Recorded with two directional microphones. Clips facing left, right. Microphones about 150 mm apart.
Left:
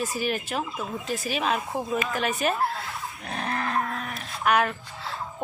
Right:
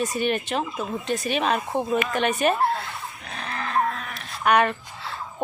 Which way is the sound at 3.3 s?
45° left (ahead or behind).